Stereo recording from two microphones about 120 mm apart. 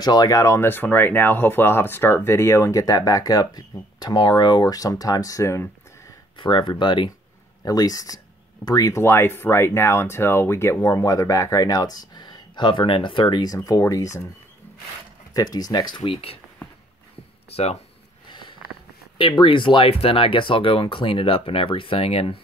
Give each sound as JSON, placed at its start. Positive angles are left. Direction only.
{"t": 0.0, "sound": "speech", "side_deg": 35}
{"t": 6.3, "sound": "speech", "side_deg": 45}
{"t": 15.3, "sound": "speech", "side_deg": 30}
{"t": 19.1, "sound": "speech", "side_deg": 45}